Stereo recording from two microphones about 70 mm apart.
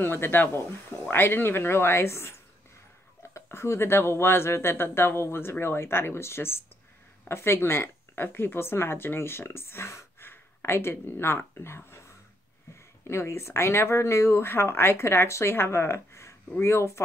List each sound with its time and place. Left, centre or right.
0.0 s a woman's voice: left